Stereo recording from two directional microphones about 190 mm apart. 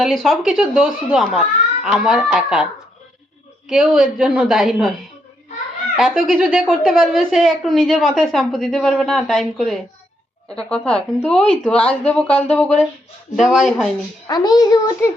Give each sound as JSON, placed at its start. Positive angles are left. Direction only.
{"t": 0.0, "sound": "a woman's voice", "side_deg": 0}
{"t": 3.7, "sound": "a woman's voice", "side_deg": 0}
{"t": 6.0, "sound": "a woman's voice", "side_deg": 0}
{"t": 14.3, "sound": "a child's voice", "side_deg": 20}